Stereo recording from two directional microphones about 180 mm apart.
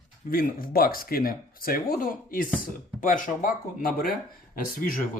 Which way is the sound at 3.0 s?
50° left (ahead or behind).